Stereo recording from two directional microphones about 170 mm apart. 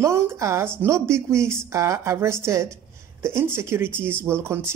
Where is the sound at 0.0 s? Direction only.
15° right (ahead or behind).